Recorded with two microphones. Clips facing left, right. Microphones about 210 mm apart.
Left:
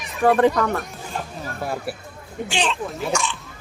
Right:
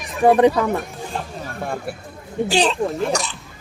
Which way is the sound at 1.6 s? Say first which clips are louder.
Even; 5° left (ahead or behind).